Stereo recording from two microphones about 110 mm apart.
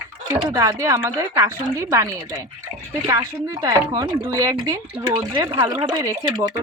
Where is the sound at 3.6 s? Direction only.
30° right (ahead or behind).